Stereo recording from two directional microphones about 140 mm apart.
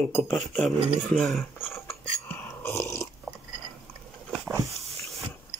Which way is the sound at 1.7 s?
15° left (ahead or behind).